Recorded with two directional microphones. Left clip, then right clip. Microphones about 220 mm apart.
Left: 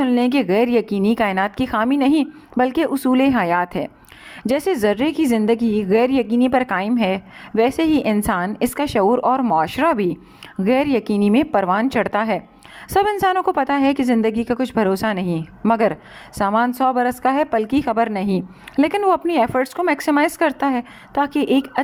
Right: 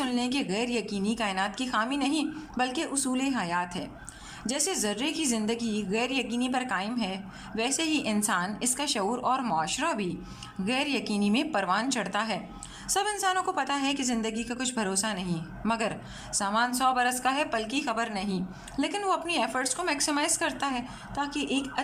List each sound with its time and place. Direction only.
0.0 s a woman's voice: 35° left (ahead or behind)